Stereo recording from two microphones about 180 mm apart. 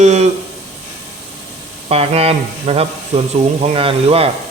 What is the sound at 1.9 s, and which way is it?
Speech, 35° right (ahead or behind).